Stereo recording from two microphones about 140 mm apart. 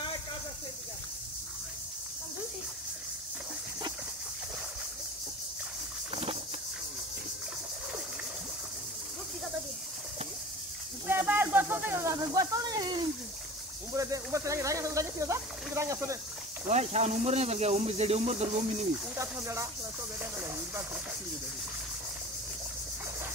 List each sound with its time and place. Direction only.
11.1 s a sound: 15° right (ahead or behind)
13.9 s speech: 25° right (ahead or behind)
16.6 s speech: 50° right (ahead or behind)
19.1 s speech: 20° right (ahead or behind)
20.2 s hiss: 15° right (ahead or behind)